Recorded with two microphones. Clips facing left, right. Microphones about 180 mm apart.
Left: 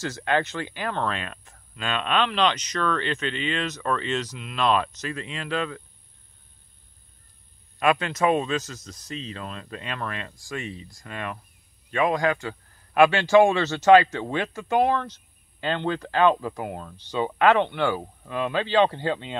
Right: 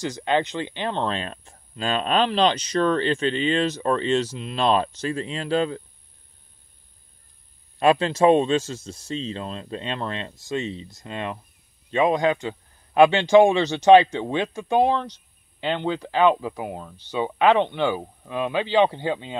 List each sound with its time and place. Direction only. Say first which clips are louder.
0.0 s speech: right 2 dB; 20° right (ahead or behind)
7.8 s speech: right 5 dB; 30° right (ahead or behind); by 19.3 s 15° right (ahead or behind)